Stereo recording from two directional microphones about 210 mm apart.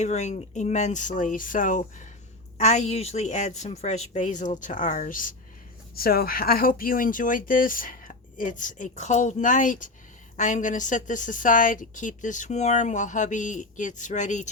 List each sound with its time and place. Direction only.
0.0 s a woman's voice: 35° left (ahead or behind)